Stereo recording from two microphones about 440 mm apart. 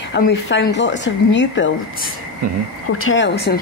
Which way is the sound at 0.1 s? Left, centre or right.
Left.